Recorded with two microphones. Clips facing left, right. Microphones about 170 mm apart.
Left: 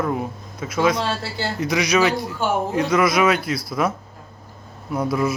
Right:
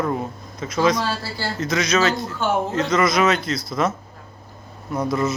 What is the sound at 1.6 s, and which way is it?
A man's voice, 15° left (ahead or behind).